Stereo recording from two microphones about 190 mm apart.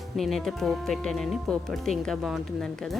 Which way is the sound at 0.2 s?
Centre (ahead or behind).